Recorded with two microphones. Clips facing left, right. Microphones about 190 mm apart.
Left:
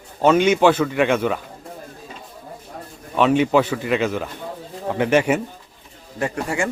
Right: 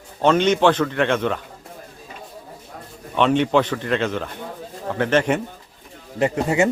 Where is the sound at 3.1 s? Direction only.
5° left (ahead or behind).